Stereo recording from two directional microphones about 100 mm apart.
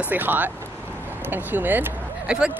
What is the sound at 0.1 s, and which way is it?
Speech, 20° right (ahead or behind).